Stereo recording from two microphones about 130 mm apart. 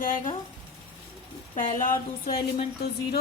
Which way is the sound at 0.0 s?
85° left.